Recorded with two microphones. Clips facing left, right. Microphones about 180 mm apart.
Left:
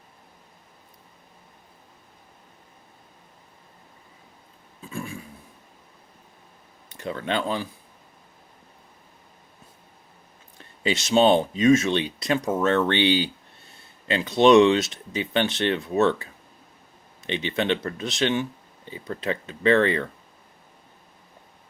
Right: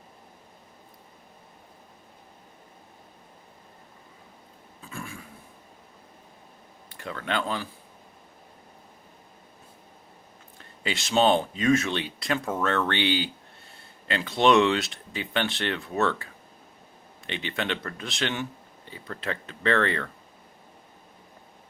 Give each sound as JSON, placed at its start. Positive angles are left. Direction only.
{"t": 4.9, "sound": "a sound", "side_deg": 30}
{"t": 7.0, "sound": "speech", "side_deg": 20}
{"t": 10.6, "sound": "speech", "side_deg": 20}